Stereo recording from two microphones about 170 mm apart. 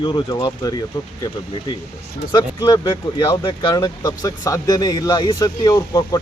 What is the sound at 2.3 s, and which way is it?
Speech, 25° left (ahead or behind).